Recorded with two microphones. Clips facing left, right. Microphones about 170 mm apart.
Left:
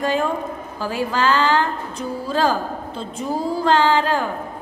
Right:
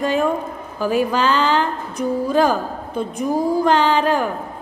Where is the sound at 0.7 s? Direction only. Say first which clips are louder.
Right 5 dB; 15° right (ahead or behind).